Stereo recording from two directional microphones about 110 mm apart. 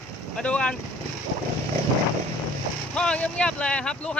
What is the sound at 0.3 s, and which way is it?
Speech, 10° left (ahead or behind).